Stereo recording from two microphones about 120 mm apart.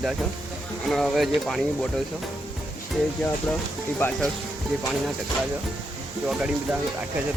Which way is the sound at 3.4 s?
15° left (ahead or behind).